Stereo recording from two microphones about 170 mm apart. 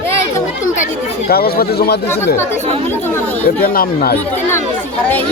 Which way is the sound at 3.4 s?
60° left (ahead or behind).